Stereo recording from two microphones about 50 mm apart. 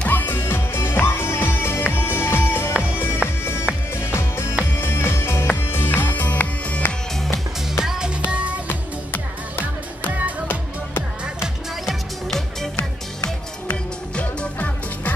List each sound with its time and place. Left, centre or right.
0.1 s music: left
0.4 s music: left
5.1 s music: left
5.6 s music: left
5.9 s music: left
7.8 s music: centre
8.3 s music: right
11.8 s music: centre
14.4 s music: left